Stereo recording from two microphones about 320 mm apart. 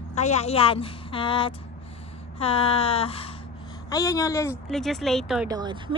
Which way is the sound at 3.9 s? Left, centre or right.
Centre.